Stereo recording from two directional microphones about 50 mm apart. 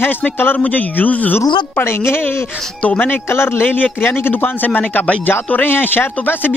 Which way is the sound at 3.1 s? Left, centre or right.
Left.